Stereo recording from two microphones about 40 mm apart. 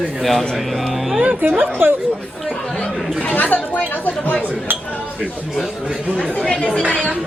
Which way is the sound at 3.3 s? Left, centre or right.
Left.